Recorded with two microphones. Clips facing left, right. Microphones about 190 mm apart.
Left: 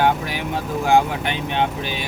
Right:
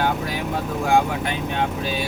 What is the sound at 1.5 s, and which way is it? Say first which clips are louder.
Speech: left 3 dB; 25° left (ahead or behind).